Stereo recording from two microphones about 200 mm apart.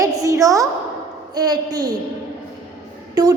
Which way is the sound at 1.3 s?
20° right (ahead or behind).